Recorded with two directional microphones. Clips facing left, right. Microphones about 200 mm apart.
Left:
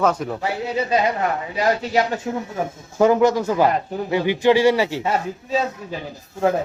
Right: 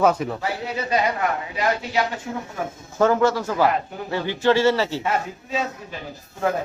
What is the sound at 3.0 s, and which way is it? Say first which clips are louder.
Speech: left 3 dB; 15° left (ahead or behind).